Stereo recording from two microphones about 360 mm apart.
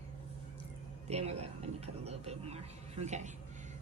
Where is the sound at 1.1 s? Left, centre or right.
Centre.